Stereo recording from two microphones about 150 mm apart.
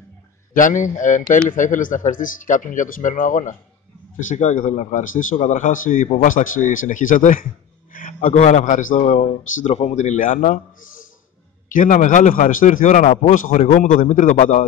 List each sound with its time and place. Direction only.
0.6 s speech: 60° left (ahead or behind)
13.0 s a man's voice: 35° left (ahead or behind)
13.3 s speech: 65° left (ahead or behind)